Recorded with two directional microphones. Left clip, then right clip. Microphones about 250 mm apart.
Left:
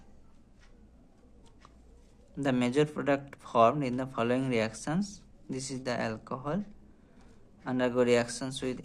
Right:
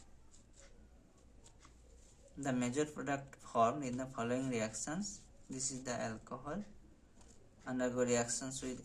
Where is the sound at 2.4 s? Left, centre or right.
Left.